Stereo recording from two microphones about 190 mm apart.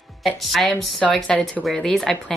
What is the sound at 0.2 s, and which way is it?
A woman's voice, centre (ahead or behind).